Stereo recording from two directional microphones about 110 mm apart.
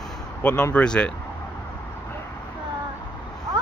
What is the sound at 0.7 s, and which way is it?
Speech, 10° left (ahead or behind).